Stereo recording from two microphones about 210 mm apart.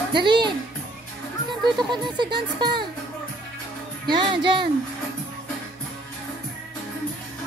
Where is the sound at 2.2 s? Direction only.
20° right (ahead or behind).